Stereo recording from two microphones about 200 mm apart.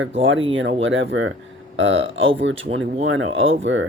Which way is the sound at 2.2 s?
30° right (ahead or behind).